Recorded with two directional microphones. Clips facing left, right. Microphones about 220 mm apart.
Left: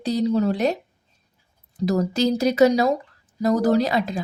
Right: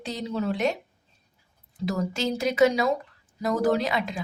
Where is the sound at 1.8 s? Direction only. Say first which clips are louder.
Left 7 dB; 40° left (ahead or behind).